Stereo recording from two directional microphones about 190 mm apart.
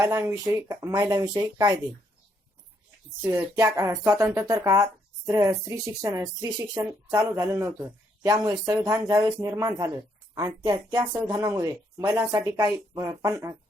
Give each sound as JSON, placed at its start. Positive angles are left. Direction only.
{"t": 0.0, "sound": "speech", "side_deg": -15}
{"t": 3.2, "sound": "speech", "side_deg": -15}
{"t": 11.0, "sound": "speech", "side_deg": -10}
{"t": 11.3, "sound": "speech", "side_deg": -20}